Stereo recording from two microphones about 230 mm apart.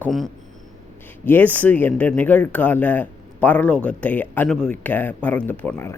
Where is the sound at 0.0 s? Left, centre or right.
Centre.